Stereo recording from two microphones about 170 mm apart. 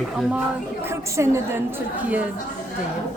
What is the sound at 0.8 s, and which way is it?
Speech, 15° right (ahead or behind).